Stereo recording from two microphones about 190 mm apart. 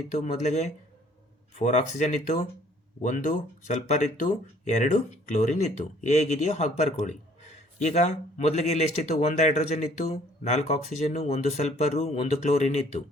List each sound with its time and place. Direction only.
0.1 s speech: 40° left (ahead or behind)